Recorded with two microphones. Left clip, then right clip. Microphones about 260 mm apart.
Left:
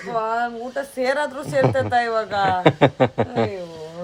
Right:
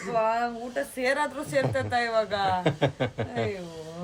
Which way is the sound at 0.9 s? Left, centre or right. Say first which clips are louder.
Left 5 dB; centre.